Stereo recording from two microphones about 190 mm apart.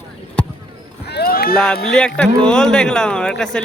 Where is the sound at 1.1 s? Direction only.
55° left (ahead or behind).